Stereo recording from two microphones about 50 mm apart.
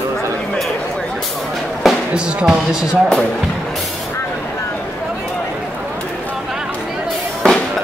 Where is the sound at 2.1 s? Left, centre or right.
Centre.